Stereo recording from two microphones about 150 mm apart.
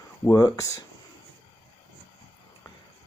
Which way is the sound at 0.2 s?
20° left (ahead or behind).